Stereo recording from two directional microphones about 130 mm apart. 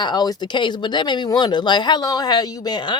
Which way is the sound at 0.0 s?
35° left (ahead or behind).